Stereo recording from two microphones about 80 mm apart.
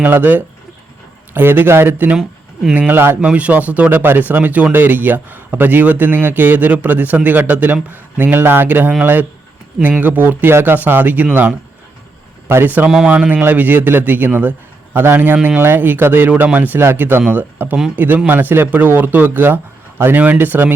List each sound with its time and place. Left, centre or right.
0.0 s speech: right
3.2 s speech: centre
10.0 s a man's voice: right